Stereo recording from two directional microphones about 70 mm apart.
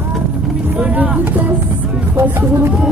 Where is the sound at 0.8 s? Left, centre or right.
Right.